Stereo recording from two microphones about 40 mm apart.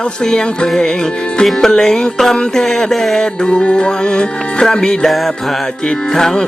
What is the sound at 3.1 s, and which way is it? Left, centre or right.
Music, left.